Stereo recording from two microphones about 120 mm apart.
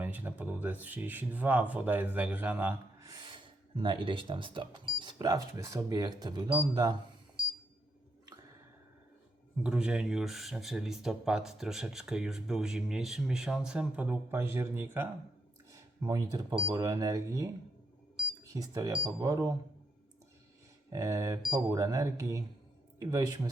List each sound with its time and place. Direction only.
0.0 s speech: 15° right (ahead or behind)
3.0 s speech: 35° right (ahead or behind)
9.6 s speech: 5° right (ahead or behind)
15.7 s speech: 30° right (ahead or behind)
20.9 s speech: 25° right (ahead or behind)